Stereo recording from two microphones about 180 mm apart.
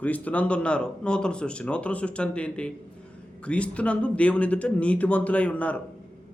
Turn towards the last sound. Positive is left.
turn(degrees=5)  # may be behind; listen again after turning